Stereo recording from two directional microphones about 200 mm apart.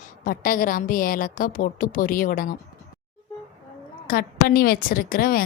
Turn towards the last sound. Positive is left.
turn(degrees=45)  # may be behind; listen again after turning